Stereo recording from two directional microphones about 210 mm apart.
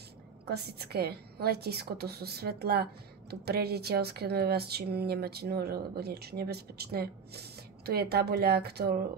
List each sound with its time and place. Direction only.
0.5 s a woman's voice: 50° right (ahead or behind)